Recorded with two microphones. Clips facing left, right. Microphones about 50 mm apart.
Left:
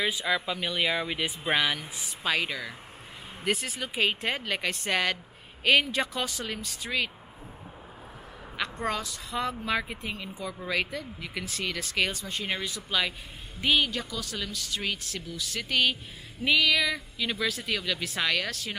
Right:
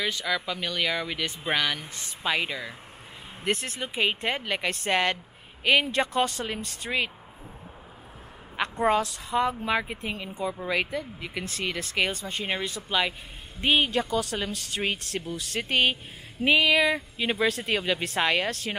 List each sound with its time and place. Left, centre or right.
0.0 s speech: centre
4.8 s speech: right
5.6 s speech: centre
5.9 s speech: right
8.7 s speech: centre; by 18.8 s right